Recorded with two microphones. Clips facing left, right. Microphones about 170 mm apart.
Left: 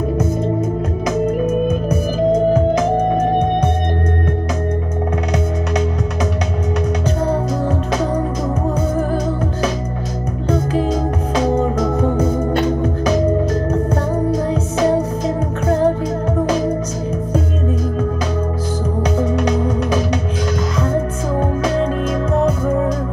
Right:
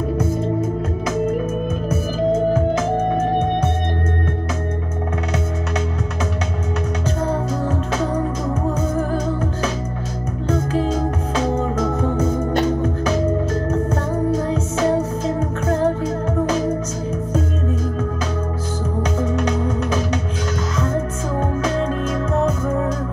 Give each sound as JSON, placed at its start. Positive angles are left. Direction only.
{"t": 1.0, "sound": "music", "side_deg": 15}
{"t": 10.5, "sound": "music", "side_deg": 15}
{"t": 12.8, "sound": "music", "side_deg": 15}
{"t": 14.3, "sound": "music", "side_deg": 15}
{"t": 19.1, "sound": "music", "side_deg": 10}